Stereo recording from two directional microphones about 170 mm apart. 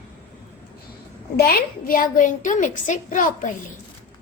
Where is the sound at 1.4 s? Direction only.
60° left (ahead or behind).